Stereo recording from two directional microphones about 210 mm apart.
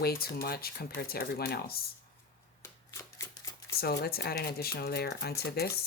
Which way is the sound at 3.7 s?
50° left (ahead or behind).